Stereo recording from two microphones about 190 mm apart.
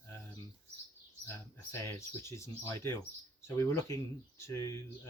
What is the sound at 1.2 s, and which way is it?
Speech, 15° left (ahead or behind).